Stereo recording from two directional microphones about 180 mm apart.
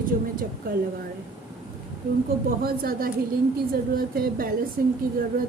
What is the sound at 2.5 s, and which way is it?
A woman's voice, 55° right (ahead or behind).